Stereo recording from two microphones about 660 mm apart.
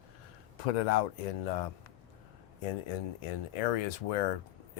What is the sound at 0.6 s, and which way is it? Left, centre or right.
Speech, left.